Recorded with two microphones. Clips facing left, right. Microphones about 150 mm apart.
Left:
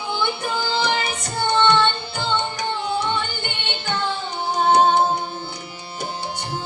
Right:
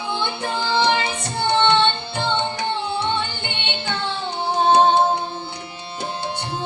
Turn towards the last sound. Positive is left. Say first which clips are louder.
# right 1 dB
turn(degrees=-25)  # may be behind; listen again after turning